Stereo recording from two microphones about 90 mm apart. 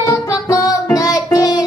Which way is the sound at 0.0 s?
40° left (ahead or behind).